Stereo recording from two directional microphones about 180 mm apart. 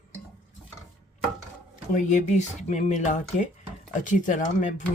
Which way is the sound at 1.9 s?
40° left (ahead or behind).